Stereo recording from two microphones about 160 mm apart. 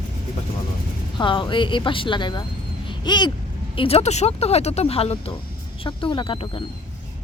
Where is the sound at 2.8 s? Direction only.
30° left (ahead or behind).